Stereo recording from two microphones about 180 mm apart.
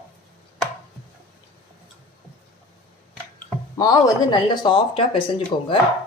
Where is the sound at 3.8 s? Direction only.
20° left (ahead or behind).